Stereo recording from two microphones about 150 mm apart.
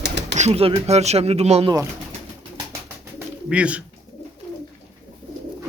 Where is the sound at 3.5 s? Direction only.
5° right (ahead or behind).